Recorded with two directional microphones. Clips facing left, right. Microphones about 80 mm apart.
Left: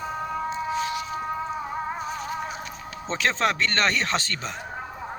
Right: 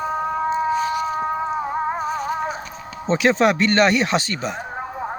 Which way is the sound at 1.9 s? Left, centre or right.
Right.